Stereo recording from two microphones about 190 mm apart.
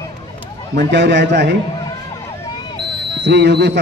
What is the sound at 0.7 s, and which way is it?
Speech, 65° right (ahead or behind).